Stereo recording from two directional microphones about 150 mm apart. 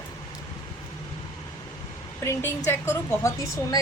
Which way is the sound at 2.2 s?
15° left (ahead or behind).